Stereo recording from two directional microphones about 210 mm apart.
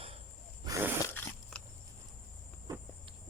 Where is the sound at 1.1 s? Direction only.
10° left (ahead or behind).